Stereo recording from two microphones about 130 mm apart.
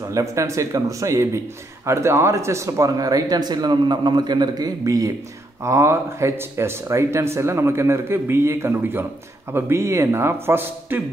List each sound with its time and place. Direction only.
0.1 s speech: 25° right (ahead or behind)